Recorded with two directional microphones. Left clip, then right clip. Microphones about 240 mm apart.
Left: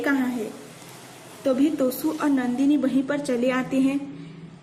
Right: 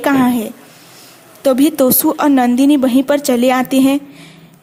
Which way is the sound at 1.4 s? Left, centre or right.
Right.